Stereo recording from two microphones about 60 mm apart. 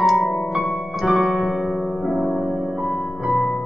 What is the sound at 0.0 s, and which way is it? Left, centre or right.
Keyboard, centre.